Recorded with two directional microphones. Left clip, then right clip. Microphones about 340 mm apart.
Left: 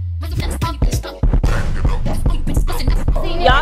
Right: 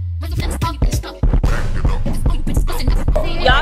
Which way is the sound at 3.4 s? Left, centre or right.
Centre.